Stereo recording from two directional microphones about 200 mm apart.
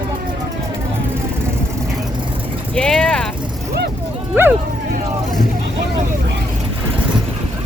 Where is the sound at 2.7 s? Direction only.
5° left (ahead or behind).